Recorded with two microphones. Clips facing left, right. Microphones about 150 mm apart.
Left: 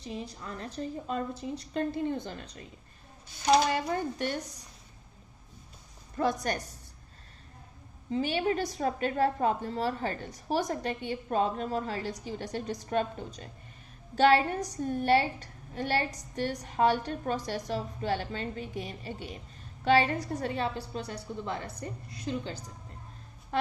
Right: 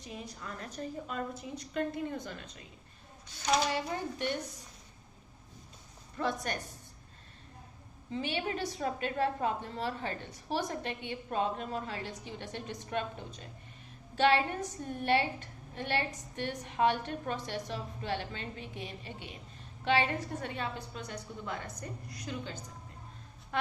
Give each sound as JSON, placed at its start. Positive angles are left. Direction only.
{"t": 0.0, "sound": "a woman's voice", "side_deg": 30}
{"t": 6.1, "sound": "a woman's voice", "side_deg": 40}
{"t": 8.1, "sound": "a woman's voice", "side_deg": 40}